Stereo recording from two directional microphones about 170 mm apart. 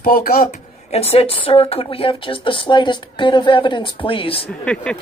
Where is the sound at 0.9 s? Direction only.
35° left (ahead or behind).